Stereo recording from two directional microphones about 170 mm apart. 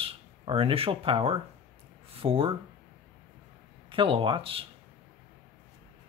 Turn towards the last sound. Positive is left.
turn(degrees=-30)  # may be behind; listen again after turning